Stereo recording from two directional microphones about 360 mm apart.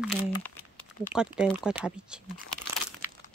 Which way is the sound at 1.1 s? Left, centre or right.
Centre.